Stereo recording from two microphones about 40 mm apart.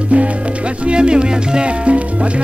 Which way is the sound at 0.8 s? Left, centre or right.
Right.